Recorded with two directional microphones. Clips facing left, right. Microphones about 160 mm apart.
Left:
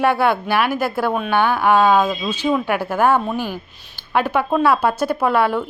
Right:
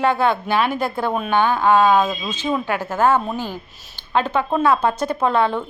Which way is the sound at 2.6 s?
15° left (ahead or behind).